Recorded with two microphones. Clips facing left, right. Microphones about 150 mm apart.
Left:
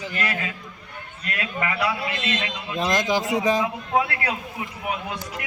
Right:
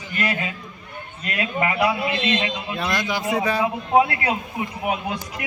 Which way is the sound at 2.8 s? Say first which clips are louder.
Left 4 dB; 40° left (ahead or behind).